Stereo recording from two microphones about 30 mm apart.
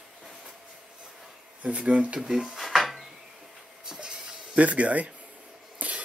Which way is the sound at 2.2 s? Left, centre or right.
Centre.